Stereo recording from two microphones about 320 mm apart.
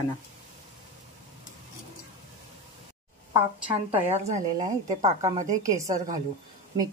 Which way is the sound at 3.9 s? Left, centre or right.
Centre.